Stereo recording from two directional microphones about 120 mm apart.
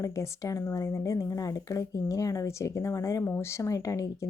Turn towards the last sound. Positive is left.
turn(degrees=25)  # may be behind; listen again after turning